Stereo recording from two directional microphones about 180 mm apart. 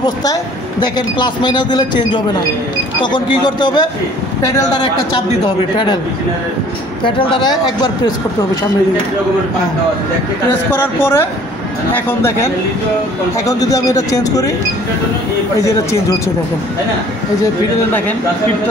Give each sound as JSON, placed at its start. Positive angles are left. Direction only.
{"t": 0.0, "sound": "speech", "side_deg": 20}
{"t": 7.1, "sound": "speech", "side_deg": 30}
{"t": 10.7, "sound": "a man's voice", "side_deg": 10}
{"t": 13.5, "sound": "speech", "side_deg": 20}
{"t": 15.6, "sound": "a man's voice", "side_deg": 15}